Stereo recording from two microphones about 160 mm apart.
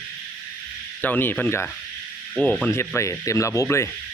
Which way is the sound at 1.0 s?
10° left (ahead or behind).